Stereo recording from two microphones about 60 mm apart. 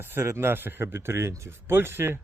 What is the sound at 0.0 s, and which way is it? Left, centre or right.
Speech, right.